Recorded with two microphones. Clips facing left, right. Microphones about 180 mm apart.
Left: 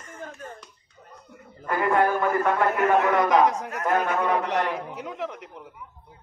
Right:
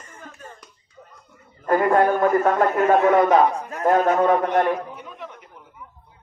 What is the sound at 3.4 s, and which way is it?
Speech, 90° left.